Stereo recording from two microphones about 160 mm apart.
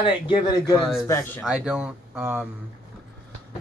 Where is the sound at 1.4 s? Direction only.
5° right (ahead or behind).